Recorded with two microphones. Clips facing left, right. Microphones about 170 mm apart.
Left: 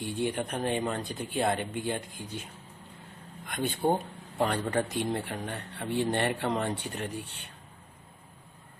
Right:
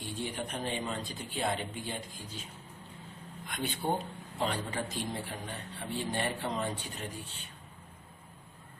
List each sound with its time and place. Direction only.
0.0 s speech: 60° left (ahead or behind)
3.4 s speech: 50° left (ahead or behind)